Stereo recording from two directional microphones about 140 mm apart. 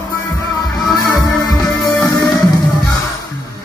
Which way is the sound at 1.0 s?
25° left (ahead or behind).